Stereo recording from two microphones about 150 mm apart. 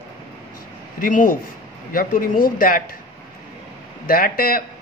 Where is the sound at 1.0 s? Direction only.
60° left (ahead or behind).